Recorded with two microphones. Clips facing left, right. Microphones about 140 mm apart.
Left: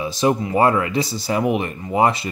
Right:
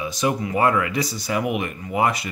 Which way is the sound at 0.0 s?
30° left (ahead or behind).